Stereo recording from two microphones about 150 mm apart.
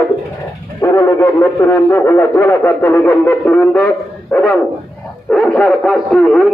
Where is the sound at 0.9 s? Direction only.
20° left (ahead or behind).